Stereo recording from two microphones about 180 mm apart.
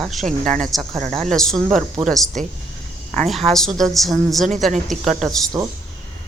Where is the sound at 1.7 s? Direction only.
Centre (ahead or behind).